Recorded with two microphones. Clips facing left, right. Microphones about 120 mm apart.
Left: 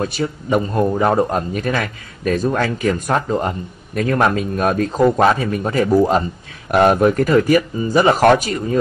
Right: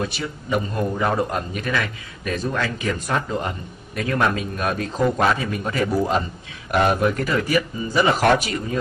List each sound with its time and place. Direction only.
0.0 s speech: 40° left (ahead or behind)